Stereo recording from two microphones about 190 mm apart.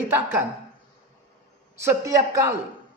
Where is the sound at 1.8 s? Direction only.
15° right (ahead or behind).